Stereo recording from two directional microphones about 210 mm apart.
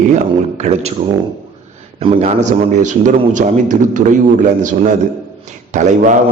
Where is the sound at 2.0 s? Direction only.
30° right (ahead or behind).